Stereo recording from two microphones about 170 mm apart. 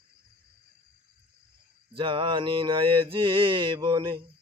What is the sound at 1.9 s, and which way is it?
Mantra, 30° right (ahead or behind).